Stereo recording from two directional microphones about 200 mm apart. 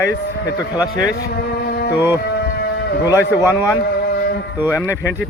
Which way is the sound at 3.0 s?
15° left (ahead or behind).